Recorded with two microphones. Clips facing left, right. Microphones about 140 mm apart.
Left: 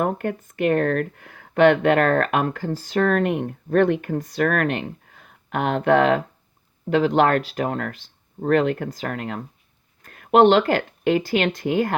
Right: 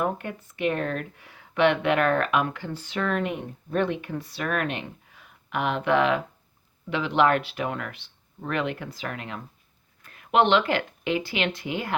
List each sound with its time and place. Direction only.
0.0 s speech: 50° left (ahead or behind)